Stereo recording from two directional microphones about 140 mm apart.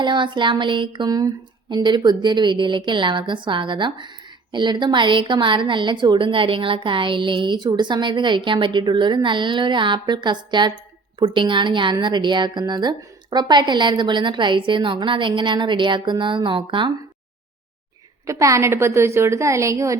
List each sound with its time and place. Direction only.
0.0 s a woman's voice: 35° right (ahead or behind)
18.3 s a woman's voice: 20° right (ahead or behind)